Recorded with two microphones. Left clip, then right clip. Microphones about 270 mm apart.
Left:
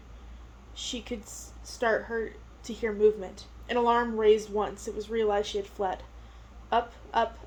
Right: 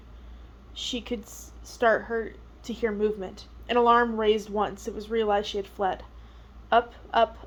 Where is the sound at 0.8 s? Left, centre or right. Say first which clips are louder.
Right 4 dB; right.